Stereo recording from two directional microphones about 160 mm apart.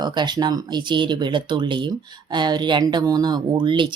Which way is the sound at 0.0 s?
25° right (ahead or behind).